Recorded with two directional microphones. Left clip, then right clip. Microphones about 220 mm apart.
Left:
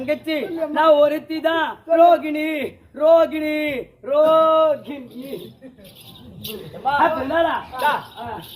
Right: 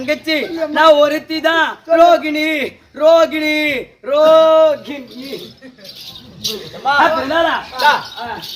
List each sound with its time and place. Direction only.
0.0 s a man's voice: 5° right (ahead or behind)
7.0 s a man's voice: 5° left (ahead or behind)
7.8 s speech: 10° right (ahead or behind)